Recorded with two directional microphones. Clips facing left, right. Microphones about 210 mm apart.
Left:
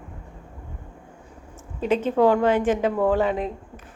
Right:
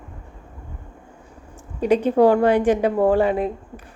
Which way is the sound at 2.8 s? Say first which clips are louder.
Right 3 dB; 40° right (ahead or behind).